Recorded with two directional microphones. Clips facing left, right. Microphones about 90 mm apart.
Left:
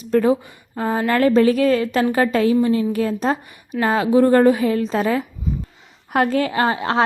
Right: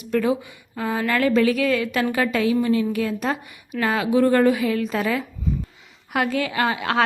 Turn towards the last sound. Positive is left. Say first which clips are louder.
# left 3 dB
turn(degrees=30)  # may be behind; listen again after turning